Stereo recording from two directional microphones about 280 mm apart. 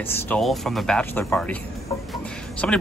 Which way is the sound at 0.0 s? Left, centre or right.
Centre.